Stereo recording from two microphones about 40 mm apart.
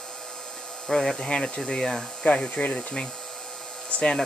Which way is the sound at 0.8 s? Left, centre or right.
Centre.